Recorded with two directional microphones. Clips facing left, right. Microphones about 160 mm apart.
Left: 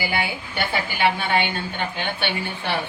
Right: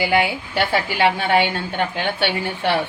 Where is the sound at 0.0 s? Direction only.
90° right.